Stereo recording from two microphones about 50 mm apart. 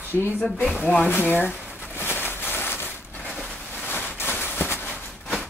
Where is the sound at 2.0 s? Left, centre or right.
Left.